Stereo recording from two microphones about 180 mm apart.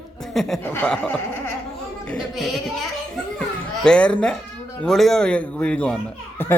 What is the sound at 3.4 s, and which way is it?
Children playing, 5° left (ahead or behind).